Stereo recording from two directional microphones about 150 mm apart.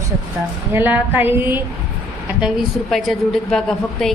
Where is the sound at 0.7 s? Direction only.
15° right (ahead or behind).